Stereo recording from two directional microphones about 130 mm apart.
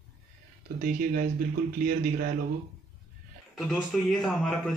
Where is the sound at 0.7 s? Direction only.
90° right.